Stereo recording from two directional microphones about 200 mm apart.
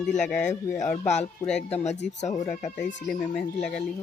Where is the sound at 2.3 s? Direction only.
15° left (ahead or behind).